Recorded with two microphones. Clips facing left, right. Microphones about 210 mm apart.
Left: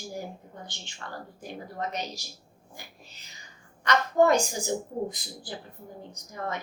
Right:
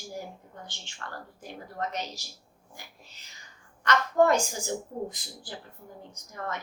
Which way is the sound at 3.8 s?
15° left (ahead or behind).